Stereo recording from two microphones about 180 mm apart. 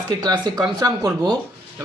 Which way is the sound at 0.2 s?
25° right (ahead or behind).